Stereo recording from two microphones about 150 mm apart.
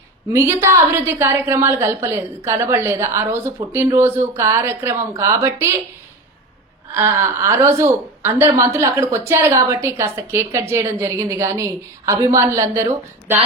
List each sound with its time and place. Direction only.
0.3 s a woman's voice: 20° right (ahead or behind)
6.9 s a woman's voice: 15° right (ahead or behind)